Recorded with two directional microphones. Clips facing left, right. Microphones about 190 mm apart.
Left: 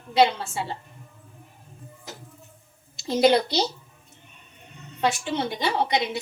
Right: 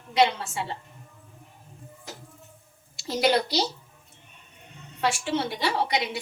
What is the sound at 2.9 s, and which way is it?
Speech, 25° left (ahead or behind).